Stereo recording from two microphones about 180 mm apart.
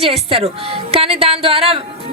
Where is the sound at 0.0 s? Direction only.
35° right (ahead or behind).